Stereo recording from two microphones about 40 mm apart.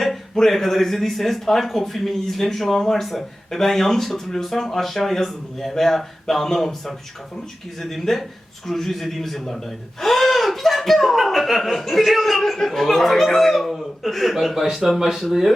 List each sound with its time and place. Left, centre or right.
0.3 s speech: centre